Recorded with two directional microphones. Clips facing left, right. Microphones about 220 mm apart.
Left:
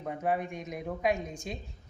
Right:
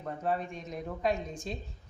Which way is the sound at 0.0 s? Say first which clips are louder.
Left 2 dB; 15° left (ahead or behind).